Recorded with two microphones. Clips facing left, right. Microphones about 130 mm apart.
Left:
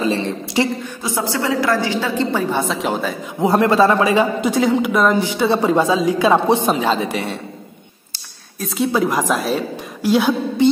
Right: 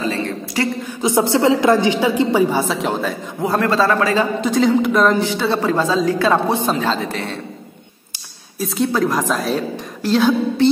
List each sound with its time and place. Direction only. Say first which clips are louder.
0.1 s a sound: left 2 dB; 20° left (ahead or behind)
1.0 s a woman's voice: right 7 dB; 25° right (ahead or behind)
2.7 s speech: even; centre (ahead or behind)
3.3 s a man's voice: left 4 dB; 20° left (ahead or behind)
5.4 s a man's voice: left 2 dB; 15° left (ahead or behind)
8.5 s speech: right 1 dB; centre (ahead or behind)
8.9 s a man's voice: left 3 dB; 10° left (ahead or behind)